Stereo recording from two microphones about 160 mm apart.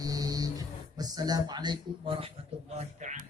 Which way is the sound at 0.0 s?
25° right (ahead or behind).